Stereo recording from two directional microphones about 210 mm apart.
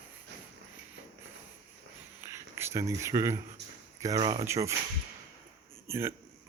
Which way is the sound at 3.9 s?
15° right (ahead or behind).